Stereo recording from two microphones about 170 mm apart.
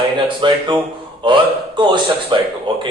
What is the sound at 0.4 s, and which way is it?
Speech, 30° right (ahead or behind).